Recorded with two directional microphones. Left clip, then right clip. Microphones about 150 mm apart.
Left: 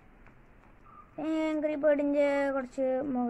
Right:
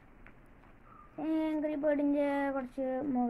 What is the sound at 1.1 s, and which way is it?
A woman's voice, 30° left (ahead or behind).